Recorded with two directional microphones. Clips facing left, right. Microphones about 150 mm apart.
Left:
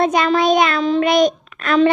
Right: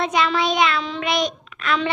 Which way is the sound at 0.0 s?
45° left (ahead or behind).